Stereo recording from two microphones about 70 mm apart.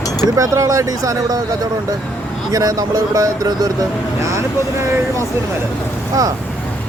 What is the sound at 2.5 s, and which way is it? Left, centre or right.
Speech, right.